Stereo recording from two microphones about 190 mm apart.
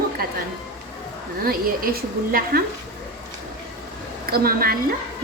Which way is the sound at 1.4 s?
50° right (ahead or behind).